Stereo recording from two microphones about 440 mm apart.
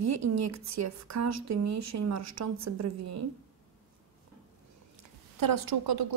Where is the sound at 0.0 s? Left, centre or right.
Right.